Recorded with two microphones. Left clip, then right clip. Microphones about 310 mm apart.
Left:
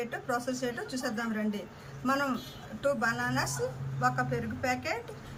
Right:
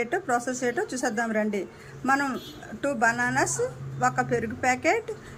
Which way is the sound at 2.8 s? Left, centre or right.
Centre.